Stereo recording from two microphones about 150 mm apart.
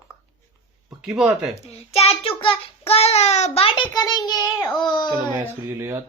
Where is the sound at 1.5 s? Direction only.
45° left (ahead or behind).